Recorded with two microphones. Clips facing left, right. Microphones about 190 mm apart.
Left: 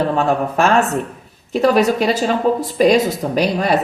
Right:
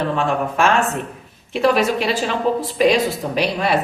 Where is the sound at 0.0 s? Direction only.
40° left (ahead or behind).